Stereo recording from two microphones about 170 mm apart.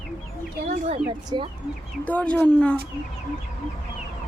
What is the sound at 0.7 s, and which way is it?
Speech, 45° right (ahead or behind).